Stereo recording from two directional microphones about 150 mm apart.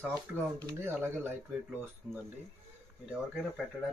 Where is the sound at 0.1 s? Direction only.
20° right (ahead or behind).